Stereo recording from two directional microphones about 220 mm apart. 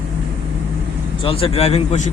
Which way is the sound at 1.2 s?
25° left (ahead or behind).